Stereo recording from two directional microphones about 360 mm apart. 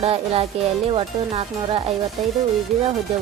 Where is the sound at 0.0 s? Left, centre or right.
Centre.